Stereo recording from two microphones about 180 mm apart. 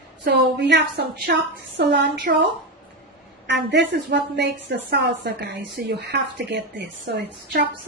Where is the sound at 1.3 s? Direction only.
60° right (ahead or behind).